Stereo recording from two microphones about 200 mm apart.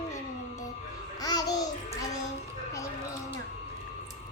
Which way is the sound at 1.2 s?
20° left (ahead or behind).